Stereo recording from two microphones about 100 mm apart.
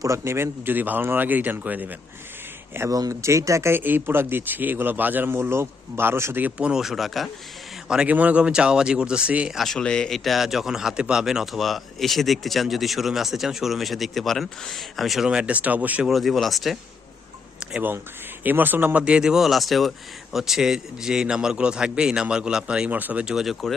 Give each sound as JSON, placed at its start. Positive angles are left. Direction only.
{"t": 0.0, "sound": "speech", "side_deg": -30}
{"t": 2.9, "sound": "speech", "side_deg": -35}
{"t": 7.9, "sound": "a man's voice", "side_deg": -10}
{"t": 9.6, "sound": "a man's voice", "side_deg": 5}
{"t": 16.0, "sound": "a man's voice", "side_deg": 0}
{"t": 17.6, "sound": "a sound", "side_deg": -10}
{"t": 18.4, "sound": "a man's voice", "side_deg": -20}
{"t": 23.2, "sound": "a man's voice", "side_deg": -5}